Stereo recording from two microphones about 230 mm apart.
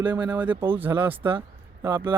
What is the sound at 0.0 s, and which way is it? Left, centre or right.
Speech, centre.